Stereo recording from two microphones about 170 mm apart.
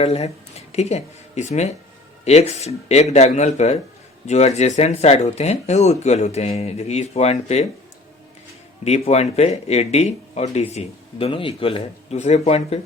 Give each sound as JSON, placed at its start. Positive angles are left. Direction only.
{"t": 0.0, "sound": "speech", "side_deg": 40}
{"t": 8.8, "sound": "speech", "side_deg": 40}